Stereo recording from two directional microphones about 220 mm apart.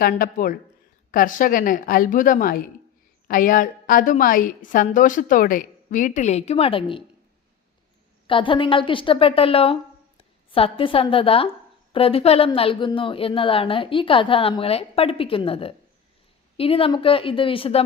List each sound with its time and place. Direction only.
0.0 s a woman's voice: 40° left (ahead or behind); by 7.0 s 25° left (ahead or behind)
8.3 s a woman's voice: 25° left (ahead or behind)